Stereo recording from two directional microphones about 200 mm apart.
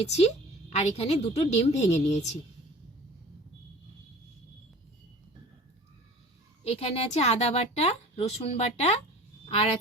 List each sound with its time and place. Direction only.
0.0 s a woman's voice: 35° left (ahead or behind)
6.7 s a woman's voice: 30° left (ahead or behind)